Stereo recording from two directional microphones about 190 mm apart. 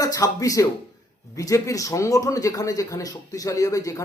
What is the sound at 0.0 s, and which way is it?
Speech, 20° left (ahead or behind).